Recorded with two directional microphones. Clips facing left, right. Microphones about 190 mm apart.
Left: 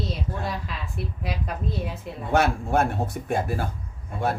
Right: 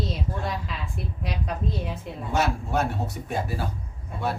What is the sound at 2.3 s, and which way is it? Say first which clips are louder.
Speech: left 4 dB; 55° left (ahead or behind).